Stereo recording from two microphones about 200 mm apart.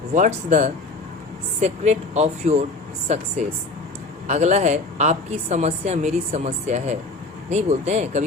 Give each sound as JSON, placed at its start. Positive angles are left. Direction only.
{"t": 0.1, "sound": "speech", "side_deg": -40}
{"t": 4.3, "sound": "speech", "side_deg": -35}